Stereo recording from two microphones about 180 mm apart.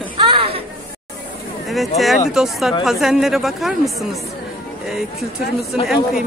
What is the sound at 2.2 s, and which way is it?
Speech, centre (ahead or behind).